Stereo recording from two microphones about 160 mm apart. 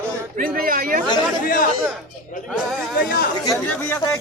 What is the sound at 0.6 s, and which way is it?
Speech, 60° right (ahead or behind).